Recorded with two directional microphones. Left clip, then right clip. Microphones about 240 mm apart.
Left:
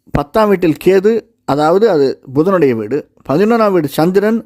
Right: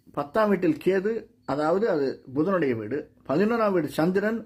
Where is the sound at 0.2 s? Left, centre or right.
Left.